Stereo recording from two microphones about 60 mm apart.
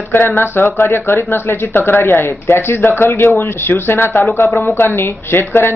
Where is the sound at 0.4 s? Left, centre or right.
Left.